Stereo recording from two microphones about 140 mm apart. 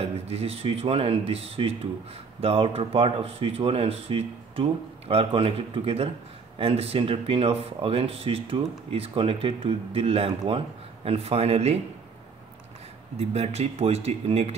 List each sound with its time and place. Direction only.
0.0 s speech: 45° right (ahead or behind)
13.2 s speech: 50° right (ahead or behind)